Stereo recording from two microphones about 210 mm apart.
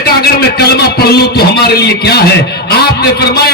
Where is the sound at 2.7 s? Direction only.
50° left (ahead or behind).